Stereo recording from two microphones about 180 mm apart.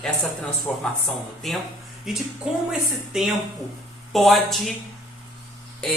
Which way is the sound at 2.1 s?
Centre (ahead or behind).